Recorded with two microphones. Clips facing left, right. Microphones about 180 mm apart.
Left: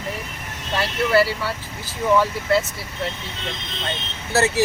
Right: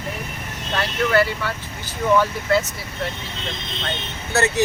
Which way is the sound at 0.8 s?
5° left (ahead or behind).